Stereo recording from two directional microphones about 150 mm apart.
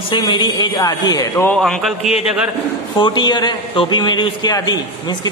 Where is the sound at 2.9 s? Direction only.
30° left (ahead or behind).